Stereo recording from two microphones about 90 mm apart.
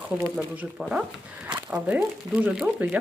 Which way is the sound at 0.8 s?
10° right (ahead or behind).